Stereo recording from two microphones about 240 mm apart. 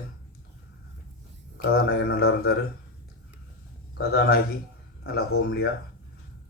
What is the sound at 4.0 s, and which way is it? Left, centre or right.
A man's voice, left.